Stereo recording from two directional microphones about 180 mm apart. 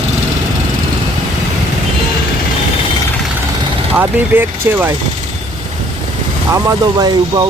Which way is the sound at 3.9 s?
10° right (ahead or behind).